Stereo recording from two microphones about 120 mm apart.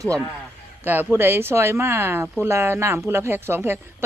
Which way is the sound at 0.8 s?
15° right (ahead or behind).